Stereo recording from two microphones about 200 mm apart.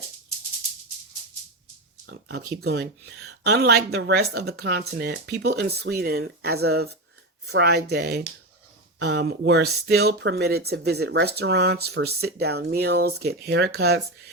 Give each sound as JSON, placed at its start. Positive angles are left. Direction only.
{"t": 2.0, "sound": "speech", "side_deg": -55}